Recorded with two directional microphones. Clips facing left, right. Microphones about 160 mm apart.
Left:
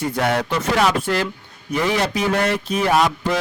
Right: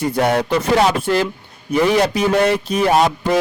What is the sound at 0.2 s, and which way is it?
Speech, 35° right (ahead or behind).